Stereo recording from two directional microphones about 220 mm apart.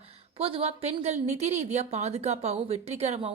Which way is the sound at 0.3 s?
25° right (ahead or behind).